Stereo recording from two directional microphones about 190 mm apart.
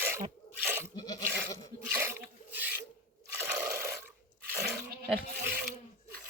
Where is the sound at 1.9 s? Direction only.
10° right (ahead or behind).